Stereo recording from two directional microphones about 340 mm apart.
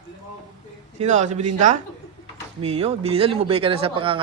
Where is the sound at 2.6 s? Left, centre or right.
Centre.